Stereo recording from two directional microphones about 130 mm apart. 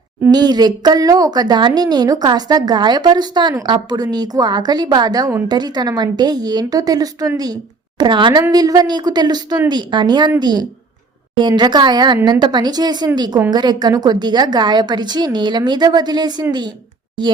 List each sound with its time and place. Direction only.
0.3 s a woman's voice: 30° right (ahead or behind)